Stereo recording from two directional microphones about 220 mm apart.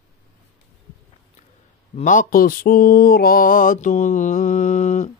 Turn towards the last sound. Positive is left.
turn(degrees=35)  # may be behind; listen again after turning